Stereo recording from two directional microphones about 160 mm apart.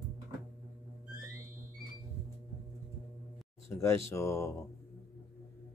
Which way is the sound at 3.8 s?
15° left (ahead or behind).